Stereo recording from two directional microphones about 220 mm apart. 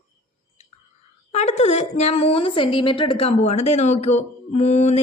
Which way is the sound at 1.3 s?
30° left (ahead or behind).